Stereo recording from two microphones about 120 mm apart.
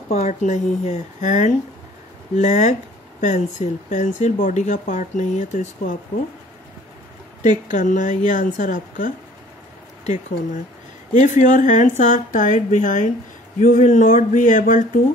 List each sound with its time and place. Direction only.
0.1 s speech: 75° left (ahead or behind)
2.3 s speech: 75° left (ahead or behind)
7.4 s speech: 90° left